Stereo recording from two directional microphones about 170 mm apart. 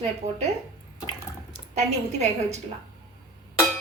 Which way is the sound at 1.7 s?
40° right (ahead or behind).